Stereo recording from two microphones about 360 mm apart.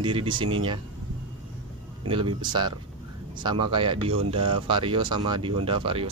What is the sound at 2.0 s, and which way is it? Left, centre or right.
Speech, centre.